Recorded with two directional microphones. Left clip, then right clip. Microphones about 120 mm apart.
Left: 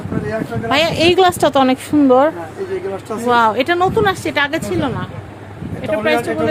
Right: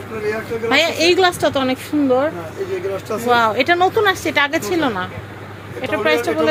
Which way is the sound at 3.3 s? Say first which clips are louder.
Left 1 dB; 35° left (ahead or behind).